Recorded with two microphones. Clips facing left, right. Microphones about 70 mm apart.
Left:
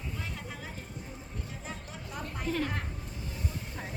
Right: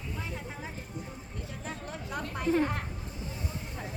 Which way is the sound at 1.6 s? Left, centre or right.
Right.